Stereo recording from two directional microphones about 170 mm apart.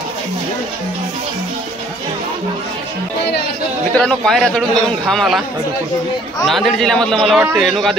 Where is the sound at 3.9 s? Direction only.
5° left (ahead or behind).